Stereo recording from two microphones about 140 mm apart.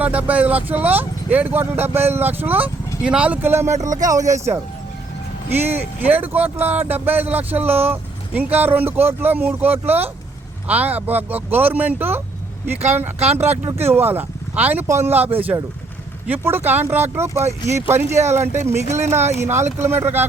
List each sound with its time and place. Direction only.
0.0 s speech: 10° right (ahead or behind)
13.1 s speech: 50° right (ahead or behind)
13.7 s speech: 15° right (ahead or behind)